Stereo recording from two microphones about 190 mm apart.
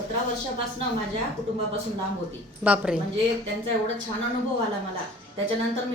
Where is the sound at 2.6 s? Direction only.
5° right (ahead or behind).